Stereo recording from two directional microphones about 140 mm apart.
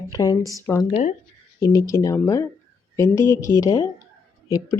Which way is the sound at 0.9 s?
55° left (ahead or behind).